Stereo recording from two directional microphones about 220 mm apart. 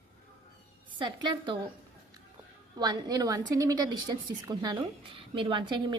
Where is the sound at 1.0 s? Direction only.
20° right (ahead or behind).